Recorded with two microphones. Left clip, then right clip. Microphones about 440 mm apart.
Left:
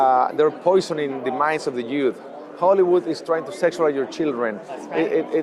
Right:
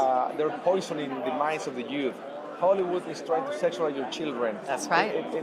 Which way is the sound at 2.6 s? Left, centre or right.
Left.